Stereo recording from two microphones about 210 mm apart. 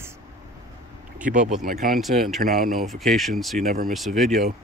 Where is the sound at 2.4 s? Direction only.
45° right (ahead or behind).